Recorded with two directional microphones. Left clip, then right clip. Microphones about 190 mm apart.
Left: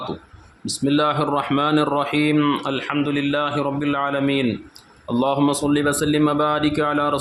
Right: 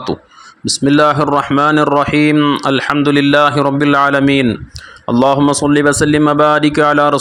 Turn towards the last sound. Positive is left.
turn(degrees=-35)  # may be behind; listen again after turning